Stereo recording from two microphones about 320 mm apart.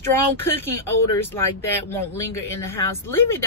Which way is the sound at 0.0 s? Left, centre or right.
Centre.